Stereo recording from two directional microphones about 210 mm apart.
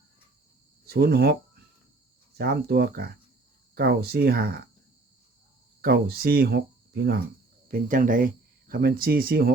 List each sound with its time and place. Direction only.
0.9 s speech: 50° right (ahead or behind)
2.4 s speech: 50° right (ahead or behind)
5.8 s speech: 45° right (ahead or behind)